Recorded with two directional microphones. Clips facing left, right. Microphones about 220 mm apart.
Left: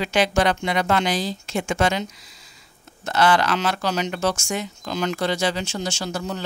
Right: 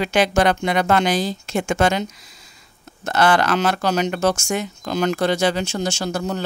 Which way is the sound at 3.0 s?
50° right (ahead or behind).